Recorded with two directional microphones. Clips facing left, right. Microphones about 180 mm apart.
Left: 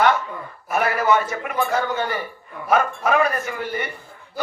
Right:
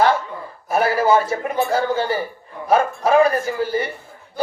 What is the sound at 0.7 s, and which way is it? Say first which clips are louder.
A man's voice: right 3 dB; 30° right (ahead or behind).